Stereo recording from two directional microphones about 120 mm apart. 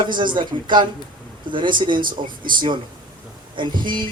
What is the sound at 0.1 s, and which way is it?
A man's voice, 40° right (ahead or behind).